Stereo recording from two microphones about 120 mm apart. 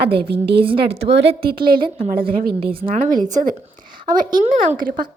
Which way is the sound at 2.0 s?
50° right (ahead or behind).